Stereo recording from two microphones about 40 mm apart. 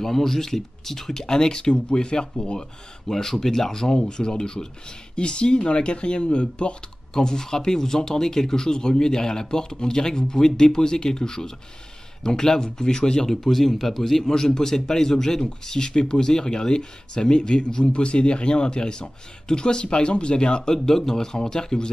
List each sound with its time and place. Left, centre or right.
0.0 s speech: centre
3.1 s speech: centre